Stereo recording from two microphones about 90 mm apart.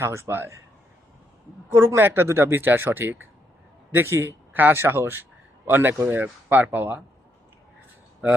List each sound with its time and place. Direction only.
0.0 s speech: 30° right (ahead or behind)
1.7 s speech: 30° right (ahead or behind)